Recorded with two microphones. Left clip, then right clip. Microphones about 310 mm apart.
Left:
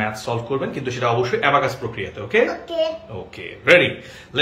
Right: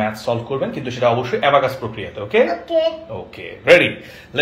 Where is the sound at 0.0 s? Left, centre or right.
Centre.